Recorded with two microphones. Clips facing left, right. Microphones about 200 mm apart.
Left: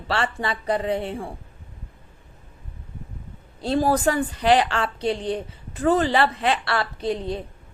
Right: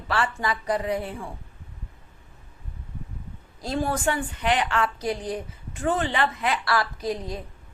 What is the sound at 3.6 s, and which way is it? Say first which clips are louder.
A woman's voice: left 6 dB; 35° left (ahead or behind).